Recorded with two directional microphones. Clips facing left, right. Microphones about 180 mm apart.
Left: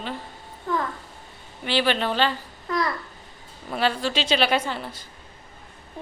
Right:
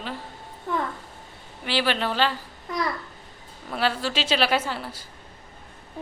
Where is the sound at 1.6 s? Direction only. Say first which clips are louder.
Left 2 dB; 5° right (ahead or behind).